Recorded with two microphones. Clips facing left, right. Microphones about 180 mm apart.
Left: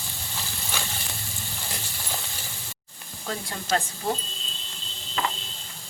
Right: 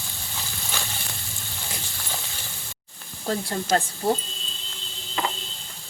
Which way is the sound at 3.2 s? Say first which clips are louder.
Right 5 dB; 40° right (ahead or behind).